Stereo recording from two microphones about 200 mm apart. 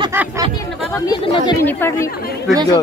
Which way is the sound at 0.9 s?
25° left (ahead or behind).